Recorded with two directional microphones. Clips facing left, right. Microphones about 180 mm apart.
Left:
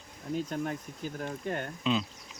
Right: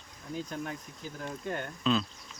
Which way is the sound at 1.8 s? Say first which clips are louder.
Right 1 dB; 15° left (ahead or behind).